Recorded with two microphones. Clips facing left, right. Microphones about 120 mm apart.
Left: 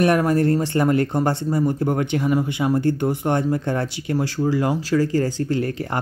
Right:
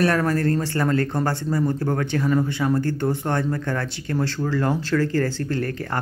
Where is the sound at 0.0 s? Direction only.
20° left (ahead or behind).